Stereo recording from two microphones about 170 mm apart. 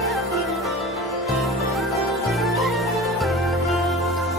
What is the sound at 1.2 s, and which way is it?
Music, centre (ahead or behind).